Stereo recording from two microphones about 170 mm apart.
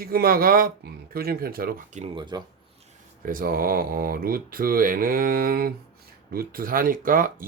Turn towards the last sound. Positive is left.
turn(degrees=-55)  # may be behind; listen again after turning